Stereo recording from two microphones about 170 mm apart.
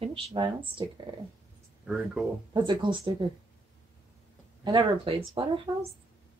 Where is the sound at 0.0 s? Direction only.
30° right (ahead or behind).